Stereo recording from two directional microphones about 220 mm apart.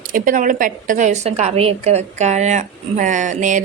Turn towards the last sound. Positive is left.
turn(degrees=-35)  # may be behind; listen again after turning